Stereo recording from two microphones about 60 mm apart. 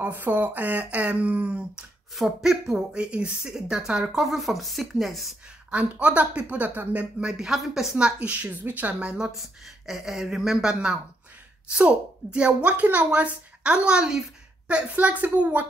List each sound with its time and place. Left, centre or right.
0.0 s speech: right
2.1 s speech: centre
5.7 s speech: right
7.2 s speech: centre
8.0 s speech: right
9.1 s speech: centre; by 15.6 s right